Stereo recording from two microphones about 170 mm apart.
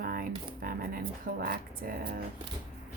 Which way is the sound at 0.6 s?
60° right (ahead or behind).